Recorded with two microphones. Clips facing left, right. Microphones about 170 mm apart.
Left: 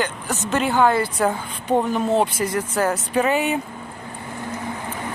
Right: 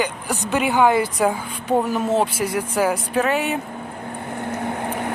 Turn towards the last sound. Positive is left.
turn(degrees=-60)  # may be behind; listen again after turning